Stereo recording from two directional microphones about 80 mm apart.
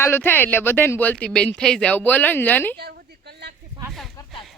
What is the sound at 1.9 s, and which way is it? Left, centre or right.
Speech, left.